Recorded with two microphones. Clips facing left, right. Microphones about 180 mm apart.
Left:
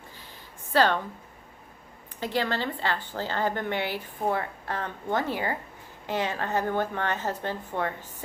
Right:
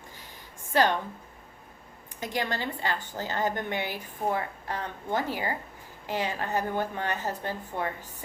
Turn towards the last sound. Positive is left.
turn(degrees=-10)  # may be behind; listen again after turning